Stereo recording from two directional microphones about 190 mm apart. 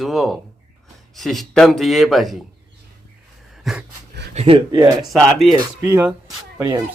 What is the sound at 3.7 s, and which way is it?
Dog, centre (ahead or behind).